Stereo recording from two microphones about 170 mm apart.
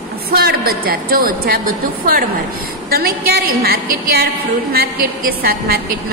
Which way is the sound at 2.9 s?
65° right (ahead or behind).